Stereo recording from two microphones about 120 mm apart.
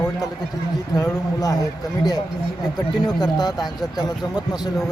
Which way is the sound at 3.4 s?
35° left (ahead or behind).